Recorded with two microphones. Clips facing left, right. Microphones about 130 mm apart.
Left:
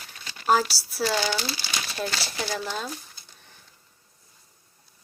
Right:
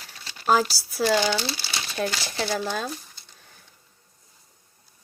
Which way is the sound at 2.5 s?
50° right (ahead or behind).